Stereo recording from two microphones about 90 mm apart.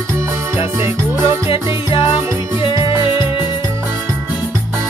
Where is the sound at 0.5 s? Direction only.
30° right (ahead or behind).